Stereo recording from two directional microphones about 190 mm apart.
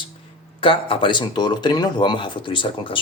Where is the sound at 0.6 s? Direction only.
25° left (ahead or behind).